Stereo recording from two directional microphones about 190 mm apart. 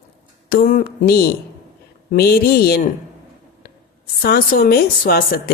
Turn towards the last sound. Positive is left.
turn(degrees=50)  # may be behind; listen again after turning